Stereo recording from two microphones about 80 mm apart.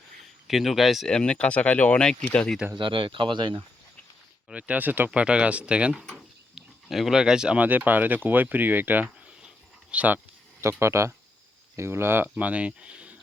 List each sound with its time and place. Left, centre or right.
0.4 s speech: centre
1.1 s speech: centre
2.7 s speech: right
4.4 s speech: centre
10.6 s speech: right; by 13.1 s centre